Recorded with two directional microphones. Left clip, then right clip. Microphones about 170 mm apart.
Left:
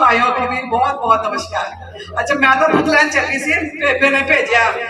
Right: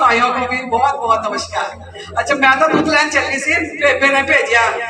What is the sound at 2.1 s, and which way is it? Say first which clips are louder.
A man's voice: right 1 dB; 25° right (ahead or behind).